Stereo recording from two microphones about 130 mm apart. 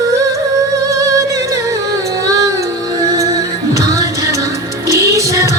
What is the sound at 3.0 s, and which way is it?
Music, 25° right (ahead or behind).